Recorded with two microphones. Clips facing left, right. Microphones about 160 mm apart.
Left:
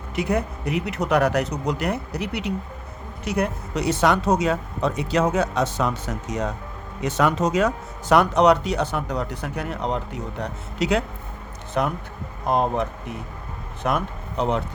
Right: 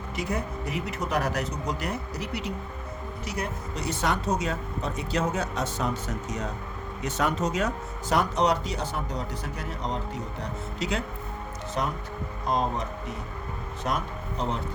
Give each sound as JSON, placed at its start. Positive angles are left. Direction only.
{"t": 0.2, "sound": "speech", "side_deg": 70}
{"t": 7.0, "sound": "speech", "side_deg": 90}
{"t": 8.1, "sound": "speech", "side_deg": 65}
{"t": 11.8, "sound": "speech", "side_deg": 60}